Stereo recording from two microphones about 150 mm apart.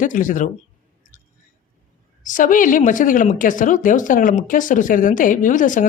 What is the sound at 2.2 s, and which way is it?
Speech, 60° left (ahead or behind).